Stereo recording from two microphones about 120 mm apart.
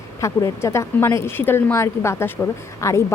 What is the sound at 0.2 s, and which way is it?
A woman's voice, 25° left (ahead or behind).